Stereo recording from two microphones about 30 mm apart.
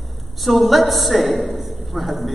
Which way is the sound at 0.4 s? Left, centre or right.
Centre.